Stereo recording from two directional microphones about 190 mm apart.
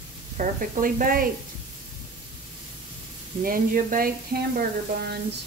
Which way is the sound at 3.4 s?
45° right (ahead or behind).